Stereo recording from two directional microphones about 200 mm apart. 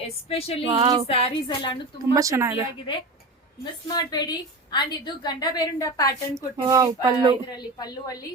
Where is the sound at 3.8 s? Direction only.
20° left (ahead or behind).